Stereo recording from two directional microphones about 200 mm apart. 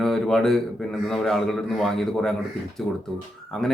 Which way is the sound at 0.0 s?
Centre (ahead or behind).